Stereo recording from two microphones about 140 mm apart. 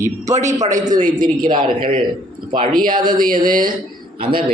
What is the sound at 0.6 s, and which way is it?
Speech, 60° right (ahead or behind).